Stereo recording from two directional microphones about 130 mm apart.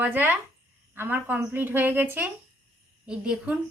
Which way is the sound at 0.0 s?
15° right (ahead or behind).